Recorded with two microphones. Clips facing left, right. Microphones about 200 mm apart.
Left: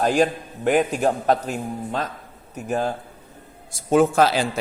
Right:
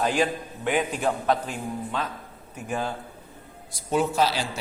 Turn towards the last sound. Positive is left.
turn(degrees=50)  # may be behind; listen again after turning